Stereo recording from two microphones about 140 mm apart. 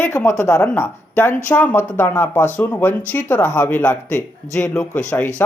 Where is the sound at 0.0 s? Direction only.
15° left (ahead or behind).